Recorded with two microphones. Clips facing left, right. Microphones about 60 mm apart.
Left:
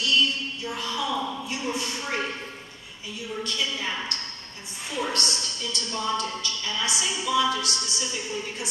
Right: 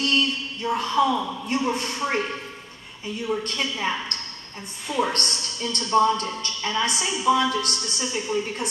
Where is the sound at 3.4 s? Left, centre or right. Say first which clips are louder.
Right 3 dB; right.